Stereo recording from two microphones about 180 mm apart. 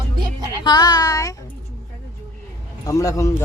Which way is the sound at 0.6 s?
25° left (ahead or behind).